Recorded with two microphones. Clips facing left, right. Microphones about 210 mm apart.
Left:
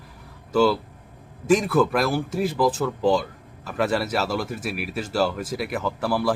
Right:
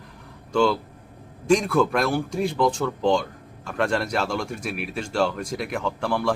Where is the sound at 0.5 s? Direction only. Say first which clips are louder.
Left 1 dB; 5° left (ahead or behind).